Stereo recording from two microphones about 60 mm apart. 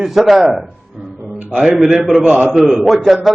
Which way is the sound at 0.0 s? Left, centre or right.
Centre.